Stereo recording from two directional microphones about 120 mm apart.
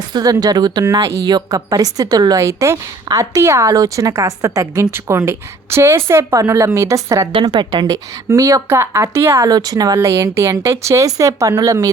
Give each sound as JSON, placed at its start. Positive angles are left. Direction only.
{"t": 0.1, "sound": "a woman's voice", "side_deg": -30}
{"t": 7.4, "sound": "speech", "side_deg": -40}
{"t": 7.9, "sound": "a woman's voice", "side_deg": -25}
{"t": 9.5, "sound": "a woman's voice", "side_deg": -35}